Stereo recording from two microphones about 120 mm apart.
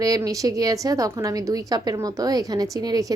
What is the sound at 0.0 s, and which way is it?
A woman's voice, 30° right (ahead or behind).